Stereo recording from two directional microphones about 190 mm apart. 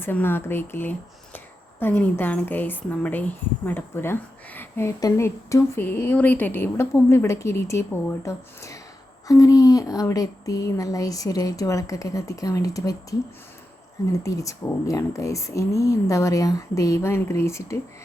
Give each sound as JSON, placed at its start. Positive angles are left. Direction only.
{"t": 0.0, "sound": "speech", "side_deg": 10}